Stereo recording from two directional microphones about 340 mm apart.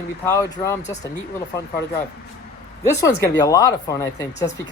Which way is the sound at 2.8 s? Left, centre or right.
Centre.